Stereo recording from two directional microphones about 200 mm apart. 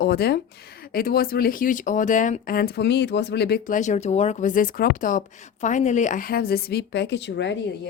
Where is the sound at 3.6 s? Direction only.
40° left (ahead or behind); by 7.6 s 60° left (ahead or behind).